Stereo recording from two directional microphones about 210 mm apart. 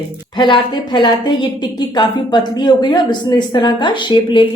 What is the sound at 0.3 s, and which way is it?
A woman's voice, 20° left (ahead or behind).